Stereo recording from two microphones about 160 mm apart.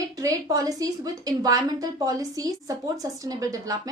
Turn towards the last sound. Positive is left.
turn(degrees=-20)  # may be behind; listen again after turning